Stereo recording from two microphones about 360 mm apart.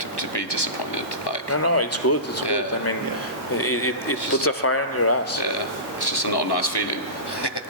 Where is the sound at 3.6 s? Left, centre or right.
Left.